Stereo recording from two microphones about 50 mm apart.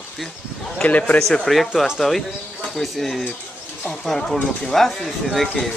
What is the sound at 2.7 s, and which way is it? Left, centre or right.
Speech, centre.